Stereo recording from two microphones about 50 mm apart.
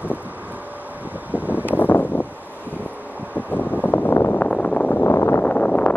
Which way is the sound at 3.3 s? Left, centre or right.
Left.